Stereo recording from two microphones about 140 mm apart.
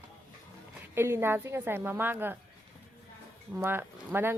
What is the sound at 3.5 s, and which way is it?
Speech, 15° right (ahead or behind).